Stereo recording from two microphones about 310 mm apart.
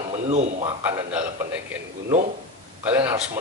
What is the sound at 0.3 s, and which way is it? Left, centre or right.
Speech, centre.